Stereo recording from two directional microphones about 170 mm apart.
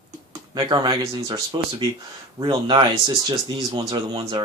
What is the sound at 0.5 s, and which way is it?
Speech, 25° right (ahead or behind).